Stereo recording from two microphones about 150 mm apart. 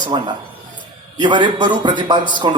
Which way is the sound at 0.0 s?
30° right (ahead or behind).